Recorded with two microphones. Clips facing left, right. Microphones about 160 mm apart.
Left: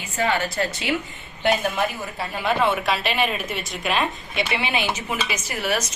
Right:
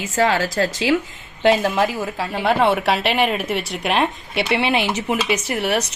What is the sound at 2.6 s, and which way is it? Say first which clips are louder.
Speech: right 4 dB; 70° right (ahead or behind).